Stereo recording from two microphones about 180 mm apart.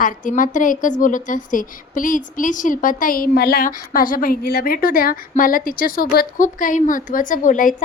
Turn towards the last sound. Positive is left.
turn(degrees=45)  # may be behind; listen again after turning